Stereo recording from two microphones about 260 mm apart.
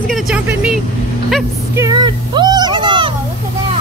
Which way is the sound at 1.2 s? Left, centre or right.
Centre.